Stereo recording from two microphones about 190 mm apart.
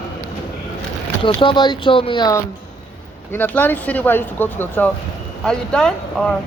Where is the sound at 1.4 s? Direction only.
25° left (ahead or behind); by 6.4 s 5° left (ahead or behind).